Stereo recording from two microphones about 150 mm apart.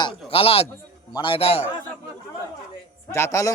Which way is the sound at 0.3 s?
40° left (ahead or behind).